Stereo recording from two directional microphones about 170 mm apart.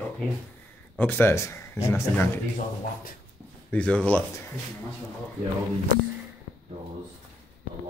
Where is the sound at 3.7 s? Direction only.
5° left (ahead or behind).